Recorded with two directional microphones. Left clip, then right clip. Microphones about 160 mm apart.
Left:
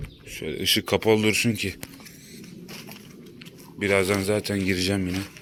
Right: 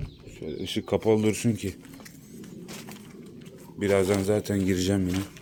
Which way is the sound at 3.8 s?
25° right (ahead or behind).